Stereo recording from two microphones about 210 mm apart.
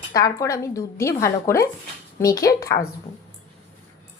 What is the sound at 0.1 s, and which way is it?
Speech, 15° left (ahead or behind).